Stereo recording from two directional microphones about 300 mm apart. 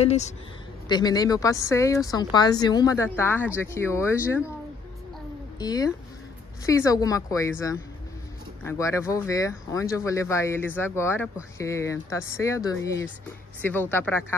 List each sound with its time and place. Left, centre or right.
0.0 s speech: left
5.6 s speech: centre
8.6 s speech: centre